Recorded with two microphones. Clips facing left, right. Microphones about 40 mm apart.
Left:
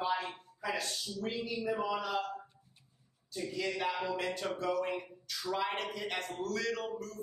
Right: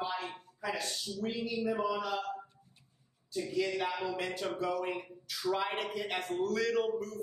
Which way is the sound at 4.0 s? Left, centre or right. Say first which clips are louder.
Even; centre.